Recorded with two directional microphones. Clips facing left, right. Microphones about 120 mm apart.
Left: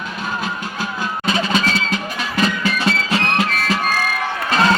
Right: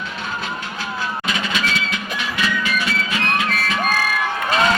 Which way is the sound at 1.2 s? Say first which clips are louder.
Left 9 dB; 35° left (ahead or behind).